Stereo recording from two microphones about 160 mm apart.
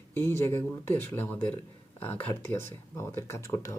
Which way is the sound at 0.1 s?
15° left (ahead or behind).